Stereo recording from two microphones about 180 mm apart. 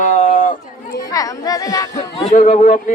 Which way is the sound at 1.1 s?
20° left (ahead or behind).